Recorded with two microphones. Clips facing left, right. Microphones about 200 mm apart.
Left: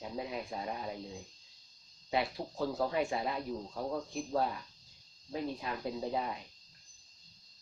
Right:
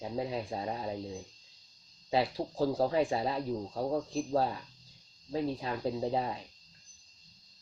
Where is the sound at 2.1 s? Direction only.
30° right (ahead or behind).